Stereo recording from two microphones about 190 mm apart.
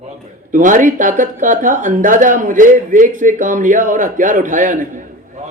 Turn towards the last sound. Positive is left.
turn(degrees=-45)  # may be behind; listen again after turning